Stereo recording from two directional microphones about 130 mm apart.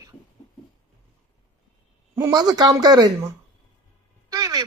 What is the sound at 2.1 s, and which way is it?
Speech, 30° right (ahead or behind).